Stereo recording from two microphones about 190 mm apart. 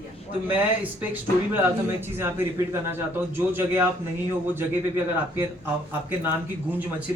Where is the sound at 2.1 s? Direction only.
15° right (ahead or behind).